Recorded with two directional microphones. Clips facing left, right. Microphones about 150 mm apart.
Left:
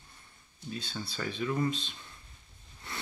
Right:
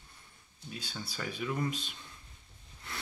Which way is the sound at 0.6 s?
10° right (ahead or behind).